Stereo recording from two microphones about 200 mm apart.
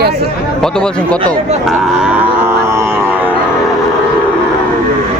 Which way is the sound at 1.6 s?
Centre (ahead or behind).